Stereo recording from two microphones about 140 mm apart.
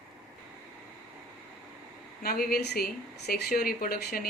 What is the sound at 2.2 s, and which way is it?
Speech, 90° left.